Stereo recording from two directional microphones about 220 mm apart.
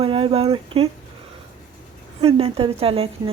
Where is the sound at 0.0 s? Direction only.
25° right (ahead or behind).